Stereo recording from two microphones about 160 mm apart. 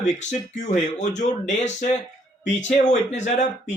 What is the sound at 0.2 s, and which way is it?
Speech, 50° left (ahead or behind).